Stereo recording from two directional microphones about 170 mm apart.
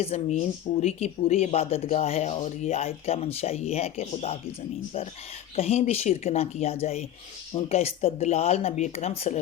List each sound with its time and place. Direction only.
0.0 s speech: 35° left (ahead or behind)
5.5 s speech: 40° left (ahead or behind)